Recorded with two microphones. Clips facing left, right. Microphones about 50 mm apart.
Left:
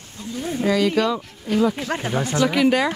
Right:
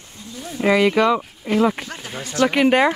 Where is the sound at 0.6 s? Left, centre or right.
Right.